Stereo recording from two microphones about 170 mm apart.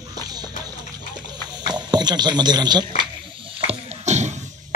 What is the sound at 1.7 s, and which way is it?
Speech, 25° right (ahead or behind).